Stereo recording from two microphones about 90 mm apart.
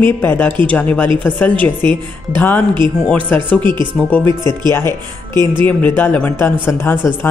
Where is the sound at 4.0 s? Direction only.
10° left (ahead or behind).